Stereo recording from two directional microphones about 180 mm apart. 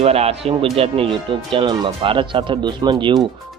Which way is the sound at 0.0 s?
35° right (ahead or behind).